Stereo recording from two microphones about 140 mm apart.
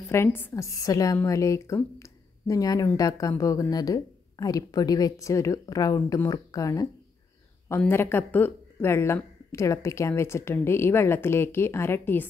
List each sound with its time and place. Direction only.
0.1 s a woman's voice: 15° left (ahead or behind)
7.9 s speech: 15° left (ahead or behind)